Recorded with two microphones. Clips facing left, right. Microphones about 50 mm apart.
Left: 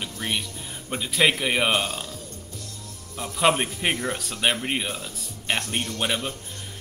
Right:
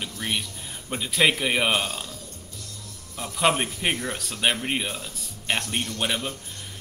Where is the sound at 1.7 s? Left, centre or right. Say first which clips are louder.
Left 1 dB; left.